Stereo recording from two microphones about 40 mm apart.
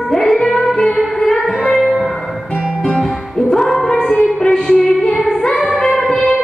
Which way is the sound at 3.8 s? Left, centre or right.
Centre.